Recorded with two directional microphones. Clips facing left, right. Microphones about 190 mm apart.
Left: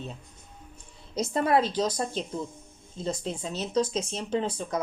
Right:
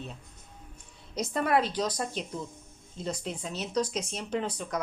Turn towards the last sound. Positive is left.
turn(degrees=30)  # may be behind; listen again after turning